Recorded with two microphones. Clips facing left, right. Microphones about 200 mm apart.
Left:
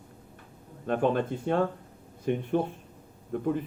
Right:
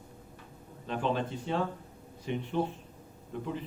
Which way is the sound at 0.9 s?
50° left (ahead or behind).